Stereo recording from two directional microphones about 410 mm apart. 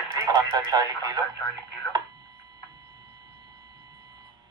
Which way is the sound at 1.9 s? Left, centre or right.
Centre.